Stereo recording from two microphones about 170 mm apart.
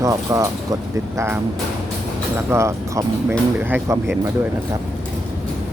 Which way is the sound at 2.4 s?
15° right (ahead or behind).